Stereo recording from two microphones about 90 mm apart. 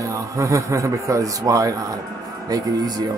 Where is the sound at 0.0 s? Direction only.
35° right (ahead or behind).